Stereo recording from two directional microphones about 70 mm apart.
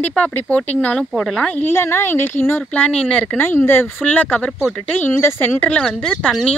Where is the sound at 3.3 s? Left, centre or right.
Left.